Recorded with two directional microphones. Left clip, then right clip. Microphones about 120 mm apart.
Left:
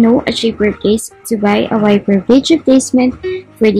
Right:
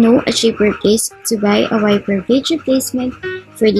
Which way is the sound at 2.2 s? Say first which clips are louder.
Left 5 dB; 20° left (ahead or behind).